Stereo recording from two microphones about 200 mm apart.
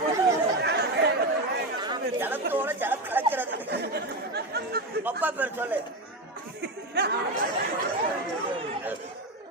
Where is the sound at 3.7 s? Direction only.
55° right (ahead or behind).